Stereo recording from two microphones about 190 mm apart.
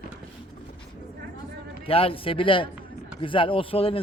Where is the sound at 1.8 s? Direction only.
30° left (ahead or behind).